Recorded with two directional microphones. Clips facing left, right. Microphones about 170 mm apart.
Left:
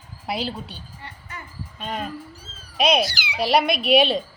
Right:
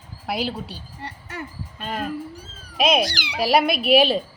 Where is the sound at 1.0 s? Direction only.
80° right.